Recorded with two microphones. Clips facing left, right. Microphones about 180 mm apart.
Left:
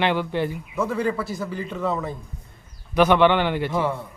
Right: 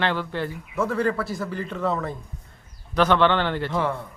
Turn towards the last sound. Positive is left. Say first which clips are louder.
# left 1 dB
turn(degrees=5)  # may be behind; listen again after turning